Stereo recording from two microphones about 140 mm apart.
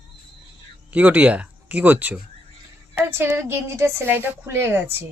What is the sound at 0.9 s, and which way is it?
A woman's voice, 10° right (ahead or behind).